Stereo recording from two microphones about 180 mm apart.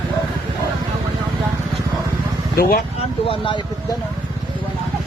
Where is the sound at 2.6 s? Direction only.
55° left (ahead or behind).